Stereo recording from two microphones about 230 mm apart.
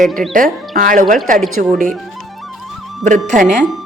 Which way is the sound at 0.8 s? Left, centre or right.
Right.